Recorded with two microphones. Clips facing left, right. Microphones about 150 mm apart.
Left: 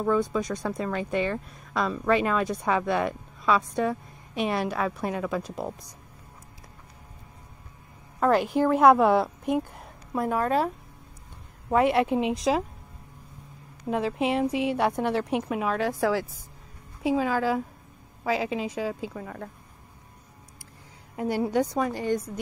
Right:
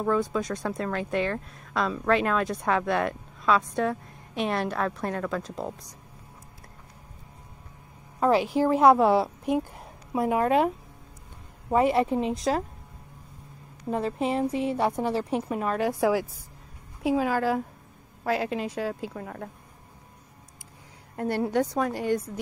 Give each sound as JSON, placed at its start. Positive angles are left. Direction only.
{"t": 0.0, "sound": "speech", "side_deg": 0}
{"t": 8.2, "sound": "a woman's voice", "side_deg": -5}
{"t": 11.7, "sound": "speech", "side_deg": 0}
{"t": 13.8, "sound": "speech", "side_deg": 5}
{"t": 14.5, "sound": "a woman's voice", "side_deg": 80}
{"t": 14.8, "sound": "speech", "side_deg": -5}
{"t": 15.8, "sound": "a woman's voice", "side_deg": -15}
{"t": 17.0, "sound": "speech", "side_deg": 0}
{"t": 21.2, "sound": "speech", "side_deg": 5}